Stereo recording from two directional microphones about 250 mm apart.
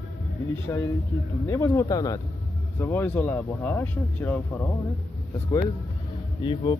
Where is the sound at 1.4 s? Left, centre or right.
Centre.